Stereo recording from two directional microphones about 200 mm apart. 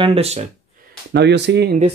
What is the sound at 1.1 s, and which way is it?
Speech, 60° right (ahead or behind).